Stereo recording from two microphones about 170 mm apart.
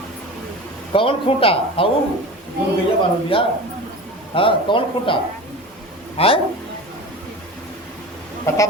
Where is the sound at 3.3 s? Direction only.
30° left (ahead or behind).